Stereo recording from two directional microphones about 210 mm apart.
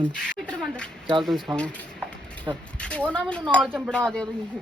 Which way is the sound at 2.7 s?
5° left (ahead or behind).